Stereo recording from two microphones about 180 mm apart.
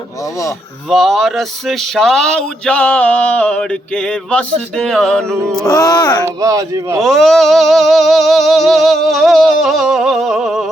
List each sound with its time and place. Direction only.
0.9 s music: centre (ahead or behind)
5.6 s a sound: 20° left (ahead or behind)
6.2 s speech: 20° right (ahead or behind)
7.0 s music: centre (ahead or behind)